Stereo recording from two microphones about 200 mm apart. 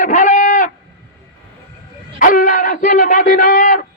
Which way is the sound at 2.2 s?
40° left (ahead or behind).